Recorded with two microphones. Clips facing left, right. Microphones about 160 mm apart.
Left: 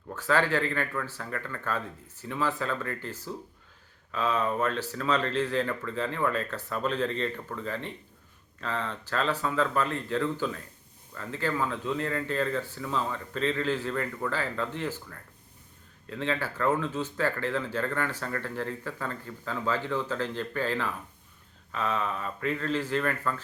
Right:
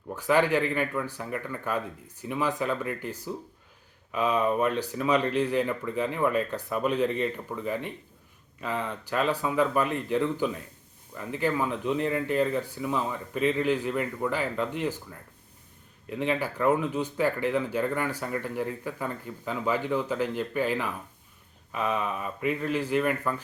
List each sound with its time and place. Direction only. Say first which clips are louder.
0.1 s speech: right 3 dB; 15° right (ahead or behind)